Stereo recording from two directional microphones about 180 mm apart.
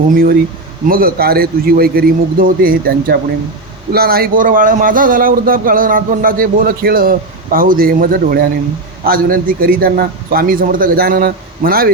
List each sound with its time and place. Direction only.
0.1 s a man's voice: 55° right (ahead or behind)